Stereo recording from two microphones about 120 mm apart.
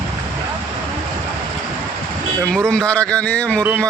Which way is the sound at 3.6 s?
15° right (ahead or behind).